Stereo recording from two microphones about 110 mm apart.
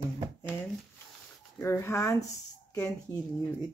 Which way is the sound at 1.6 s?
25° left (ahead or behind).